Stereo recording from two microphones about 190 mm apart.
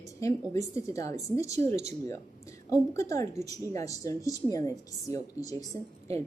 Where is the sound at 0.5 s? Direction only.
15° left (ahead or behind).